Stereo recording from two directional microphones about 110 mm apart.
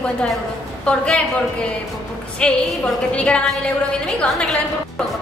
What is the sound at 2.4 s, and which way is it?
A woman's voice, 10° left (ahead or behind).